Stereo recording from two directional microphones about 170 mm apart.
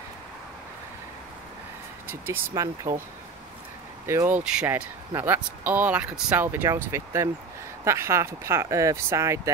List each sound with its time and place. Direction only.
2.0 s speech: 15° right (ahead or behind)
4.1 s speech: 15° right (ahead or behind)